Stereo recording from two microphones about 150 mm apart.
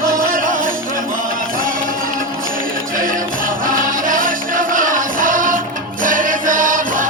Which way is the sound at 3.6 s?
65° right (ahead or behind).